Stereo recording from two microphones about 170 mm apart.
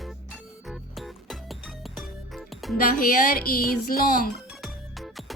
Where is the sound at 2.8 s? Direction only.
60° left (ahead or behind).